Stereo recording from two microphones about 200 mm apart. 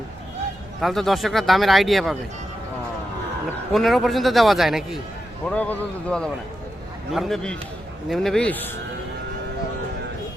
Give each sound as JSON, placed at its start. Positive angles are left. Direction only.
{"t": 0.8, "sound": "speech", "side_deg": 0}
{"t": 3.7, "sound": "speech", "side_deg": 0}